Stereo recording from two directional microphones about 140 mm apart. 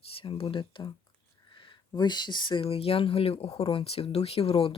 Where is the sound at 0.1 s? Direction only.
40° left (ahead or behind).